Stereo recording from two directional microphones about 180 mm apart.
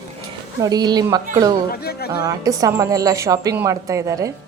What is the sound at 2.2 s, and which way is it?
A woman's voice, 20° right (ahead or behind).